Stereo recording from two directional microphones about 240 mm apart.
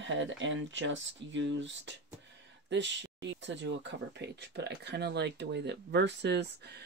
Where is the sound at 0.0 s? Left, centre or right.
Right.